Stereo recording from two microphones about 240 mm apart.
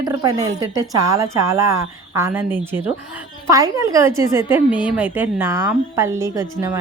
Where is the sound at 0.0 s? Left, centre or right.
Centre.